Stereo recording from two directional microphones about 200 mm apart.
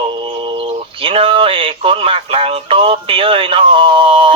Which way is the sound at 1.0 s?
25° right (ahead or behind).